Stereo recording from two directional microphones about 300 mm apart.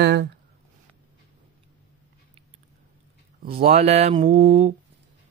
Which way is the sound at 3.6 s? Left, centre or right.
Right.